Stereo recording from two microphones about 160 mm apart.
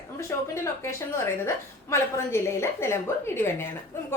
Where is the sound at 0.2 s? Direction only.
20° left (ahead or behind).